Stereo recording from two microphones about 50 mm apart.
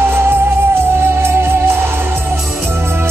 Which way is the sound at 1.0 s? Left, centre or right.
Right.